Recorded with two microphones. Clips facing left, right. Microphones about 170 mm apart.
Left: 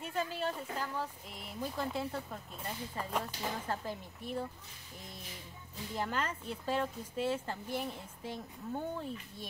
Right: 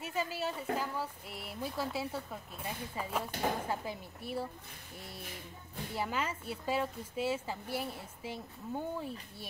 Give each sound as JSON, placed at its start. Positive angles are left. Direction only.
{"t": 0.0, "sound": "speech", "side_deg": -5}
{"t": 3.3, "sound": "speech", "side_deg": -55}
{"t": 3.6, "sound": "speech", "side_deg": -10}
{"t": 5.9, "sound": "speech", "side_deg": -5}